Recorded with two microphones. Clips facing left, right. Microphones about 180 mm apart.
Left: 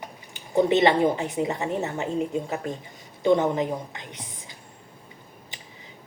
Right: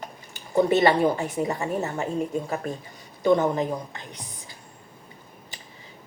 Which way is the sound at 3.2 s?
20° left (ahead or behind).